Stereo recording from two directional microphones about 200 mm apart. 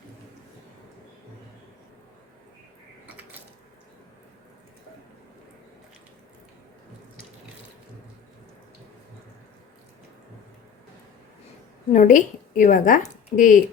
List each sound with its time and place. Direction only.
11.9 s a woman's voice: 40° left (ahead or behind)